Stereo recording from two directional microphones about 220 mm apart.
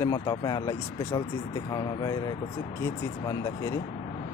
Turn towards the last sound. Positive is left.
turn(degrees=15)  # may be behind; listen again after turning